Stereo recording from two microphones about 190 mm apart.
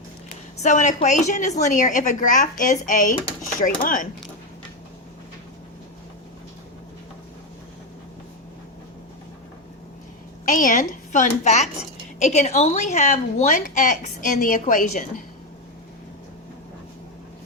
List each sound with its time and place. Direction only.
0.6 s a woman's voice: 40° left (ahead or behind)
10.4 s a woman's voice: 45° left (ahead or behind)